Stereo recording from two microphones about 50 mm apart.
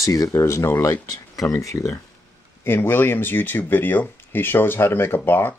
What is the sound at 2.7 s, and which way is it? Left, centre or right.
Speech, left.